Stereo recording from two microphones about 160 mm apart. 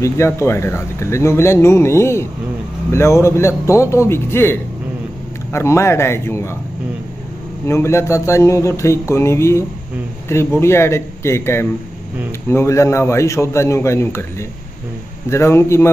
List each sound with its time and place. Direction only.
0.0 s speech: 15° left (ahead or behind)
7.6 s speech: 15° left (ahead or behind)
15.2 s speech: 15° left (ahead or behind)